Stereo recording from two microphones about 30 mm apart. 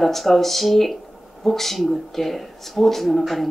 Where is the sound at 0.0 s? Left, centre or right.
Centre.